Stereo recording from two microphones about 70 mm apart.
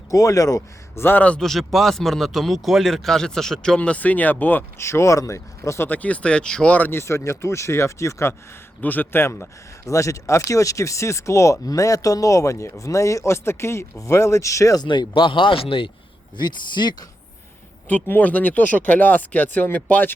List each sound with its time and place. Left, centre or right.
0.1 s speech: left
1.0 s speech: left
1.4 s speech: centre
3.8 s speech: left
4.8 s speech: left
5.9 s speech: centre
6.7 s speech: left
7.0 s speech: left
8.8 s speech: left
9.8 s speech: left
14.8 s speech: left
16.4 s speech: left
18.1 s speech: left